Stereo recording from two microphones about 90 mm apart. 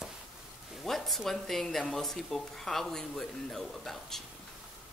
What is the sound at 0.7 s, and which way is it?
Speech, centre (ahead or behind).